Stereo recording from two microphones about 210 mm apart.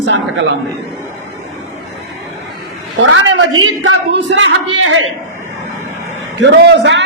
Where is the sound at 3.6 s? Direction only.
70° right (ahead or behind).